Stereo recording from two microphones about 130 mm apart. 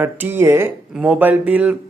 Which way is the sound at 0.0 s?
15° right (ahead or behind).